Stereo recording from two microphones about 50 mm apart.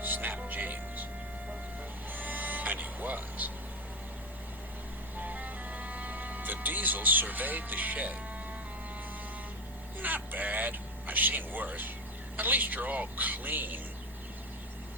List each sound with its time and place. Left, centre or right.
0.0 s music: right
2.1 s music: right
5.2 s music: right
10.3 s a man's voice: right